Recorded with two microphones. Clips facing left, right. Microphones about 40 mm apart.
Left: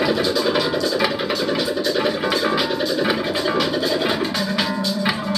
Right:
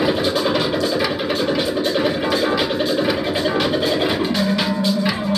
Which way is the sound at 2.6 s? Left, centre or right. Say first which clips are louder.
Right 1 dB; right.